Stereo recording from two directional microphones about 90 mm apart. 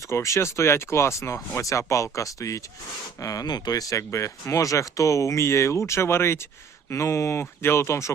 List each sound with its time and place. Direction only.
0.1 s speech: 35° left (ahead or behind)